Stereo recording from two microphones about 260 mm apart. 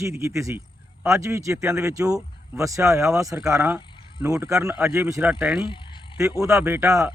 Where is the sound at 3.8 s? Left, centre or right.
Centre.